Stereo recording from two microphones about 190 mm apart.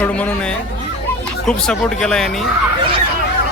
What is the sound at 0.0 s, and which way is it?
Speech, 5° left (ahead or behind).